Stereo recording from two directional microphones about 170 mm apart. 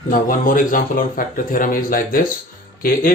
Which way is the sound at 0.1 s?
50° left (ahead or behind).